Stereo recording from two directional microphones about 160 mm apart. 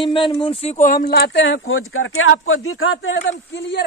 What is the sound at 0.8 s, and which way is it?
Speech, 60° left (ahead or behind).